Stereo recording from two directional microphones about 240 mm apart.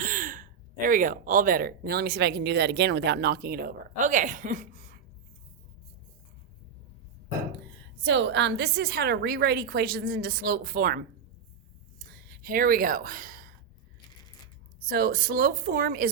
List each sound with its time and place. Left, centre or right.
0.0 s speech: right
8.0 s a woman's voice: right
11.9 s a sound: right
14.8 s a woman's voice: right